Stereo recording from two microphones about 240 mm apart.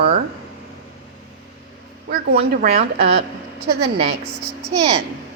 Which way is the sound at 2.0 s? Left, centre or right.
Right.